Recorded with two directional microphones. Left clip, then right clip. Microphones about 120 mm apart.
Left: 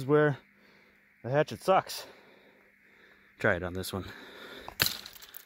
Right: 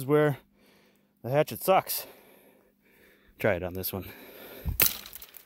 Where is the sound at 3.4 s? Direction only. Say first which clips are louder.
Right 1 dB; 5° right (ahead or behind).